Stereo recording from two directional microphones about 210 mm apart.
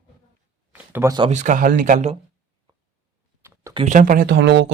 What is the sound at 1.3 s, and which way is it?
Speech, 35° right (ahead or behind).